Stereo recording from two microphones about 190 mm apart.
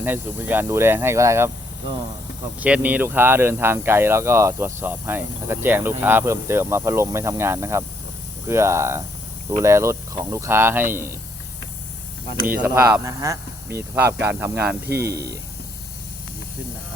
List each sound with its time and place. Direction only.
0.0 s speech: 10° right (ahead or behind)
2.6 s speech: 5° right (ahead or behind)
12.5 s speech: 10° right (ahead or behind)
14.8 s speech: 60° right (ahead or behind)